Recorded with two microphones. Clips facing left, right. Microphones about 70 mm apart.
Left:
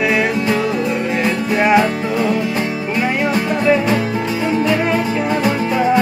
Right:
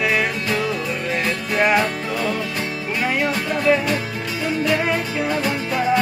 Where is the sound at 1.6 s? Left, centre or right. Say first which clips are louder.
Left 4 dB; centre.